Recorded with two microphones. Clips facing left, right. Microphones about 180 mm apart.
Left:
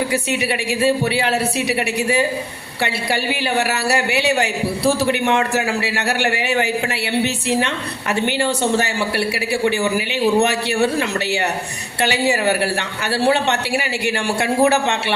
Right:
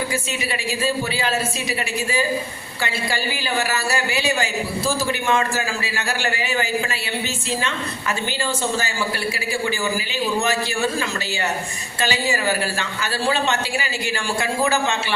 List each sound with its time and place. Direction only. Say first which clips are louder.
0.1 s a woman's voice: left 5 dB; 65° left (ahead or behind)
2.8 s a woman's voice: left 4 dB; 65° left (ahead or behind)